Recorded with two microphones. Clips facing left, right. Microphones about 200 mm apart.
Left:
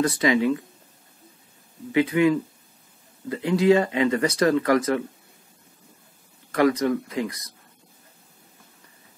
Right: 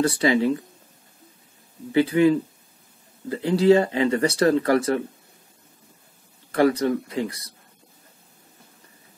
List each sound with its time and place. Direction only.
0.0 s speech: 30° right (ahead or behind)
1.9 s speech: 30° right (ahead or behind)
6.5 s speech: 30° right (ahead or behind)